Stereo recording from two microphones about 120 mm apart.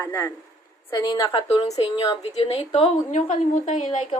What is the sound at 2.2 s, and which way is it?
A woman's voice, 60° left (ahead or behind).